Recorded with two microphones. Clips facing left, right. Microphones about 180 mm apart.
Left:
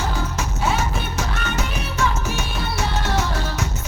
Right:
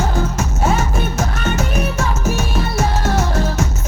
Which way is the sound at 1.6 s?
45° right (ahead or behind).